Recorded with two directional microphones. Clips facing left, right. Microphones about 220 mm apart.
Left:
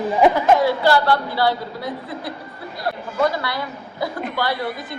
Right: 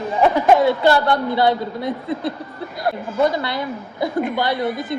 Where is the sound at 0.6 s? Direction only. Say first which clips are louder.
Right 2 dB; 20° right (ahead or behind).